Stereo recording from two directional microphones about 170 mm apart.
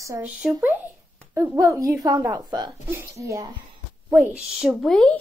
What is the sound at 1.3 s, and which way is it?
A woman's voice, 20° right (ahead or behind).